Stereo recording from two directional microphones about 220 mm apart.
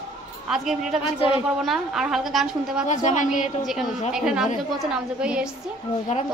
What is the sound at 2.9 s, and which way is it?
Speech, 35° left (ahead or behind).